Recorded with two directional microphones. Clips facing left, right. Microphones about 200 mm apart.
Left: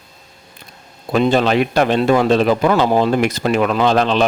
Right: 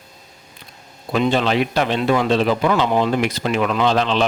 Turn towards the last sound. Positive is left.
turn(degrees=50)  # may be behind; listen again after turning